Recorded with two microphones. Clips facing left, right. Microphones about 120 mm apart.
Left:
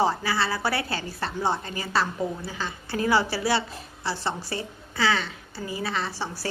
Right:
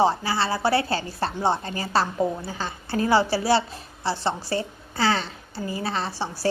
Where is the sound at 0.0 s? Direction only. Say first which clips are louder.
Right 3 dB; 25° right (ahead or behind).